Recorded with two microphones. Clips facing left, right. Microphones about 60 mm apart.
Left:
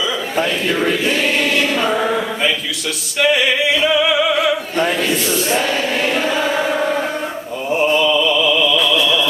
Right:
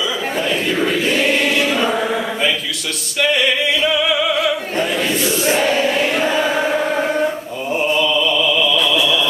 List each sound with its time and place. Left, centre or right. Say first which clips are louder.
1.4 s choir: even; centre
1.9 s music: left 1 dB; centre
5.6 s choir: right 2 dB; right
6.6 s chant: even; centre
7.7 s a sound: left 2 dB; centre